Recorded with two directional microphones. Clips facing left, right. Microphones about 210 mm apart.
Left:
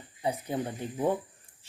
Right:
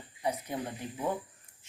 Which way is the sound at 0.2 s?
30° left (ahead or behind).